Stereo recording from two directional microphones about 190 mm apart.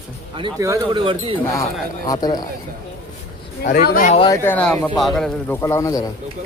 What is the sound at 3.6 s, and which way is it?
Music, 55° left (ahead or behind).